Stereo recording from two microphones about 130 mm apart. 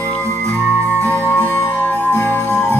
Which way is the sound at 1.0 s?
15° left (ahead or behind).